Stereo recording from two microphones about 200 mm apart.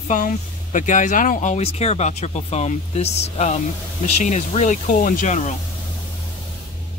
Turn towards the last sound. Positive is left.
turn(degrees=35)  # may be behind; listen again after turning